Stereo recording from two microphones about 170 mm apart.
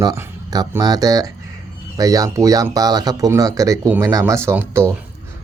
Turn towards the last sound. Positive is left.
turn(degrees=-15)  # may be behind; listen again after turning